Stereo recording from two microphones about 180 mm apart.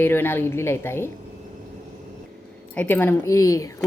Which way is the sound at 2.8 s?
10° left (ahead or behind).